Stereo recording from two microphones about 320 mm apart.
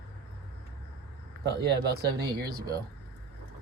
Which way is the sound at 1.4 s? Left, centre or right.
Right.